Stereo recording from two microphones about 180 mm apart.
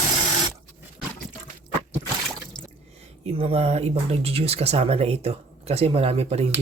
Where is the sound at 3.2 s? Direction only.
30° right (ahead or behind).